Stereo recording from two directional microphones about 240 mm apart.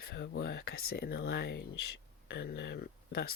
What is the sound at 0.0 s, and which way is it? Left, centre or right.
Speech, left.